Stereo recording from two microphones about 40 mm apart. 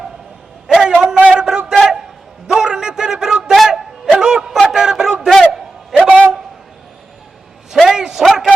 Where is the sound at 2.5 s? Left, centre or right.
Centre.